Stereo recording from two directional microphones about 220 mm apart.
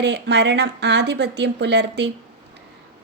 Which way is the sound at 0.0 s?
50° right (ahead or behind).